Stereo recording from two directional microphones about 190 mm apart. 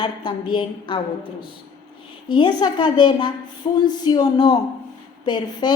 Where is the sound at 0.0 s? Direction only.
25° left (ahead or behind).